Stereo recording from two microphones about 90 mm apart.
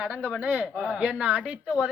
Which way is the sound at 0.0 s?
10° right (ahead or behind).